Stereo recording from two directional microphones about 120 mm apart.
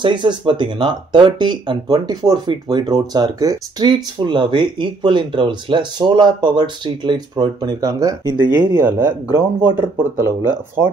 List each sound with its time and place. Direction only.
0.0 s speech: 40° right (ahead or behind)
8.8 s speech: 15° right (ahead or behind)